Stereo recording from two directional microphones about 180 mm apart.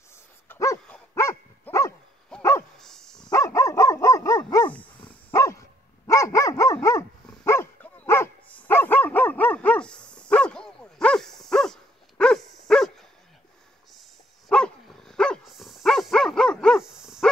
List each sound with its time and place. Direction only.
0.5 s dog: 15° left (ahead or behind)
2.8 s dog: 5° left (ahead or behind)
3.3 s dog: 15° left (ahead or behind)
14.5 s dog: 5° left (ahead or behind)